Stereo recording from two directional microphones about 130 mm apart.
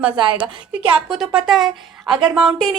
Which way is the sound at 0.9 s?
5° right (ahead or behind).